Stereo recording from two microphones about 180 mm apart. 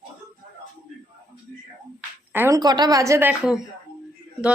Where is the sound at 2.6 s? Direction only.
25° right (ahead or behind).